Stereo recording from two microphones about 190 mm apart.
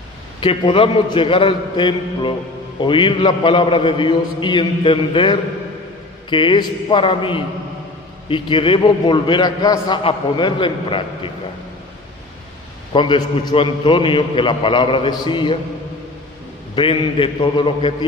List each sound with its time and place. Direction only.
0.4 s a man's voice: 25° left (ahead or behind)
12.9 s a man's voice: 25° left (ahead or behind)
16.7 s a man's voice: 25° left (ahead or behind)